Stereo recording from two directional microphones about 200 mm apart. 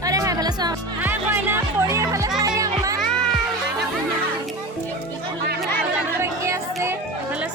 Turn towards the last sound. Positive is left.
turn(degrees=-15)  # may be behind; listen again after turning